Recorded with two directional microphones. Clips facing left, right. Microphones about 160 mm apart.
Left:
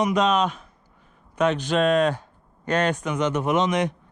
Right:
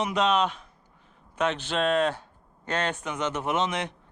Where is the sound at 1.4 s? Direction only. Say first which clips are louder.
Left 5 dB; 15° left (ahead or behind).